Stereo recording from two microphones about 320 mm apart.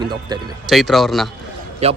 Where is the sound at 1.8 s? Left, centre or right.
Centre.